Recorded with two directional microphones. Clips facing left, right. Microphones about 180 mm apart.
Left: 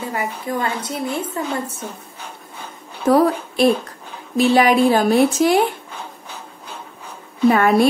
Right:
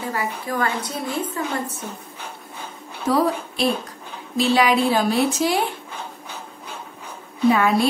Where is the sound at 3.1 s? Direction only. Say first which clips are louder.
Left 5 dB; 55° left (ahead or behind).